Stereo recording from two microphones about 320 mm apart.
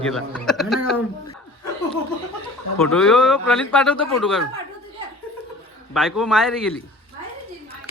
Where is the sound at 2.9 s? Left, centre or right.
Centre.